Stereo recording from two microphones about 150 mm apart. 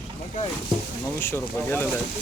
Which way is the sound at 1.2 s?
15° left (ahead or behind).